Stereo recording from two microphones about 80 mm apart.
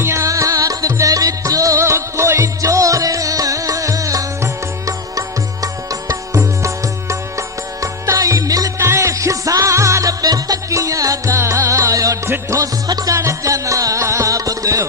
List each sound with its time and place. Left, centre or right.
0.0 s music: right
5.9 s music: right
8.8 s music: right
13.1 s music: right